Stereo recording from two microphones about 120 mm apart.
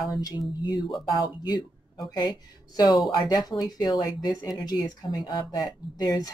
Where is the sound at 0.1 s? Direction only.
30° left (ahead or behind).